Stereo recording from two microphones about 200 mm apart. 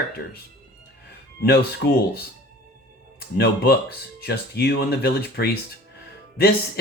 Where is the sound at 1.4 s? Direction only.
50° left (ahead or behind).